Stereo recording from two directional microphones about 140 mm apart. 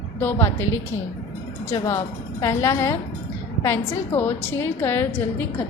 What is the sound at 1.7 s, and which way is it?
A woman's voice, 20° left (ahead or behind).